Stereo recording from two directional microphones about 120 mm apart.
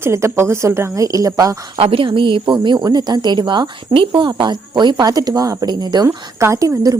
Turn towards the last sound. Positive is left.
turn(degrees=-30)  # may be behind; listen again after turning